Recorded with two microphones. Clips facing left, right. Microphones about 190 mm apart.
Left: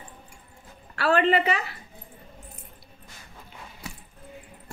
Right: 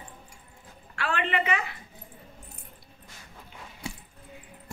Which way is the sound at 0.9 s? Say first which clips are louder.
Left 8 dB; 40° left (ahead or behind).